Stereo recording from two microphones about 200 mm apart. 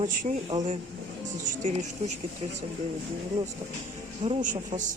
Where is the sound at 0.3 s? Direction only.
30° right (ahead or behind).